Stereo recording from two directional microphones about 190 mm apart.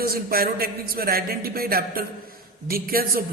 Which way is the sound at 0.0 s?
55° right (ahead or behind).